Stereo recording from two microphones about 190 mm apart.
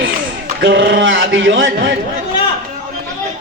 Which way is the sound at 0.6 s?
70° right (ahead or behind).